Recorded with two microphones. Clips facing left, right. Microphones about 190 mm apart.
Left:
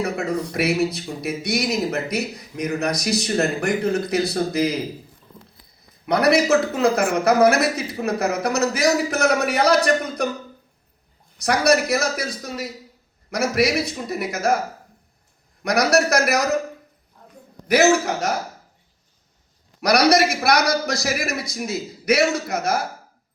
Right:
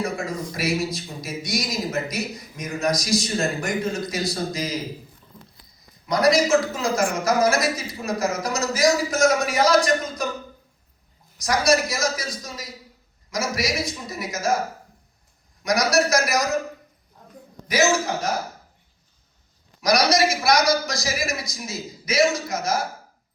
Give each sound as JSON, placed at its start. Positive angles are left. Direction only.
{"t": 0.0, "sound": "speech", "side_deg": 60}
{"t": 6.1, "sound": "speech", "side_deg": 60}
{"t": 11.3, "sound": "speech", "side_deg": 60}
{"t": 15.6, "sound": "speech", "side_deg": 60}
{"t": 17.7, "sound": "speech", "side_deg": 65}
{"t": 19.8, "sound": "speech", "side_deg": 65}